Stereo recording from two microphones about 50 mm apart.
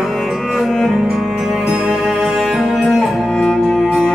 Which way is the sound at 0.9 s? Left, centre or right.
Centre.